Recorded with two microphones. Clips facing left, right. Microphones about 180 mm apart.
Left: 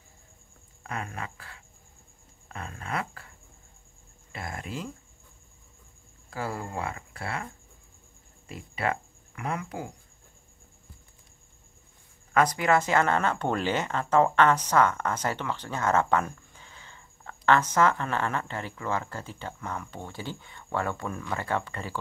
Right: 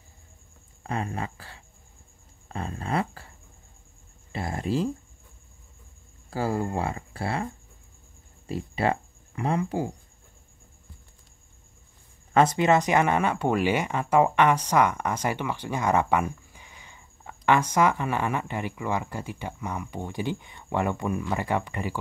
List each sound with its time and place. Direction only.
0.8 s speech: 30° right (ahead or behind)
6.6 s speech: 30° right (ahead or behind)
8.5 s speech: 30° right (ahead or behind)
12.4 s speech: 25° right (ahead or behind)